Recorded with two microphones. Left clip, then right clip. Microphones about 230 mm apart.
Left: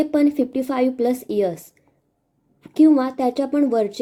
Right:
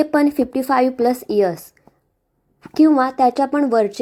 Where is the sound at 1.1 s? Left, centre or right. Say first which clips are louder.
Right 3 dB; right.